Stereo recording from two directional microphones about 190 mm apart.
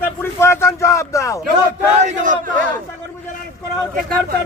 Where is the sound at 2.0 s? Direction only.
40° right (ahead or behind).